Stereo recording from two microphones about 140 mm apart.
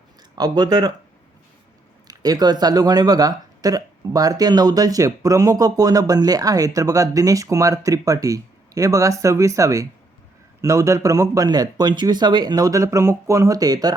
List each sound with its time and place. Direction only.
0.3 s speech: 30° right (ahead or behind)
2.0 s speech: 25° right (ahead or behind)